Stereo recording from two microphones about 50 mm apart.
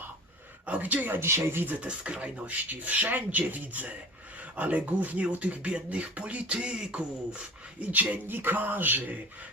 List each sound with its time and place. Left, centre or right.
0.7 s speech: right
1.2 s speech: right
1.6 s speech: right